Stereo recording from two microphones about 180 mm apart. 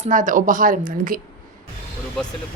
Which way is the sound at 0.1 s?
45° right (ahead or behind).